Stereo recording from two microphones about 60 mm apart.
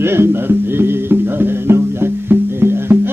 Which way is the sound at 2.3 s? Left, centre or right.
Right.